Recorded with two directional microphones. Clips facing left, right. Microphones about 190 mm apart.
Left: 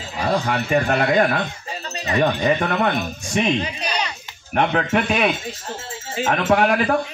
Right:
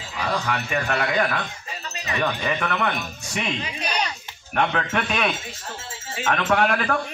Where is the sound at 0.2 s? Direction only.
35° left (ahead or behind).